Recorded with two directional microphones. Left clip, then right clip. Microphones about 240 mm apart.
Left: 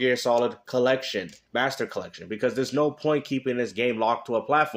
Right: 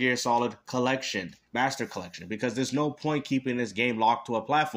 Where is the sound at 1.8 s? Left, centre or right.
Right.